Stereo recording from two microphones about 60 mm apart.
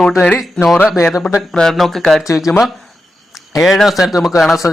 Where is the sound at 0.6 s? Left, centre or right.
Centre.